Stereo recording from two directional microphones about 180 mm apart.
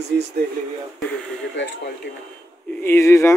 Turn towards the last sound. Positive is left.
turn(degrees=15)  # may be behind; listen again after turning